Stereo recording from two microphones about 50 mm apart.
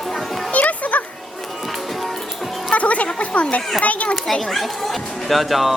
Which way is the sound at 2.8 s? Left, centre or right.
Left.